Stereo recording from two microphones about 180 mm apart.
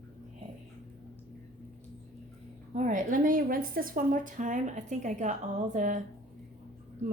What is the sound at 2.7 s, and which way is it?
A woman's voice, 45° right (ahead or behind).